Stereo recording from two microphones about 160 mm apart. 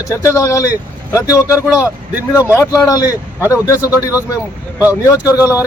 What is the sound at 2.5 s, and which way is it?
A man's voice, 20° left (ahead or behind).